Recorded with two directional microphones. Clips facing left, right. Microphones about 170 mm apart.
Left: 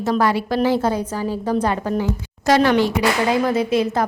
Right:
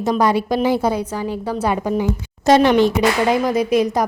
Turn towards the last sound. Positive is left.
turn(degrees=-15)  # may be behind; listen again after turning